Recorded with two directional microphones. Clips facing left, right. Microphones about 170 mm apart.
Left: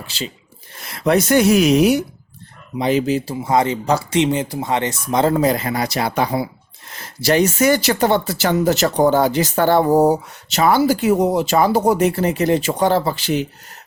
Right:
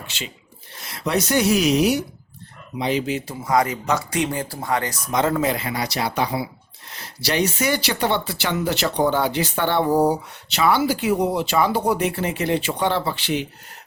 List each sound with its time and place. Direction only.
0.0 s speech: 35° left (ahead or behind)
0.7 s speech: 55° left (ahead or behind)